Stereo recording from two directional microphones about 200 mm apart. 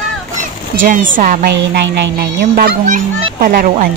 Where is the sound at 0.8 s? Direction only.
40° right (ahead or behind).